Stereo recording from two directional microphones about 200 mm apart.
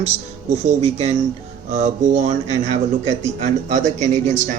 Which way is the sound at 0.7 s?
35° right (ahead or behind).